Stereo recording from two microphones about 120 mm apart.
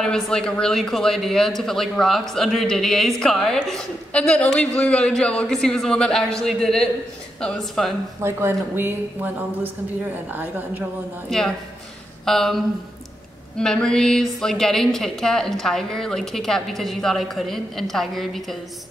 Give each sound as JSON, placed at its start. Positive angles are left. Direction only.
{"t": 0.0, "sound": "a woman's voice", "side_deg": 5}
{"t": 8.2, "sound": "a woman's voice", "side_deg": -20}
{"t": 11.2, "sound": "a woman's voice", "side_deg": 5}